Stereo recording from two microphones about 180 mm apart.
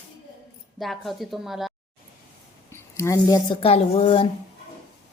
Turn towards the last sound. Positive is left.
turn(degrees=30)  # may be behind; listen again after turning